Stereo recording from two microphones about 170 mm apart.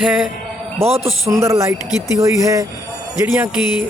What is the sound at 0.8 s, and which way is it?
Speech, 35° right (ahead or behind).